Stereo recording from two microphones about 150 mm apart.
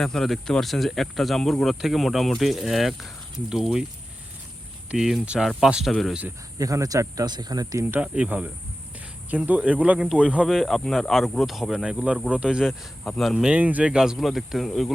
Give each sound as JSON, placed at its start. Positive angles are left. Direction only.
{"t": 0.0, "sound": "speech", "side_deg": 5}
{"t": 4.9, "sound": "speech", "side_deg": -5}
{"t": 6.6, "sound": "speech", "side_deg": -20}